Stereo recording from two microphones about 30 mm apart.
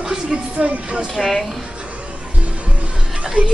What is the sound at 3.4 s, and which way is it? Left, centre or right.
Speech, right.